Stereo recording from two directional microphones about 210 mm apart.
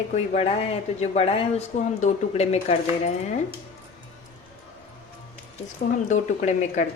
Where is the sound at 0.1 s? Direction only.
30° left (ahead or behind).